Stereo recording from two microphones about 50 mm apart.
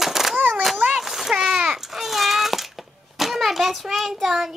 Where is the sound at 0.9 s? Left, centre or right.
Centre.